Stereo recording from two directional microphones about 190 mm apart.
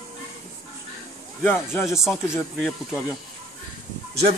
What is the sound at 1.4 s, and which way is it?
Speech, 15° left (ahead or behind).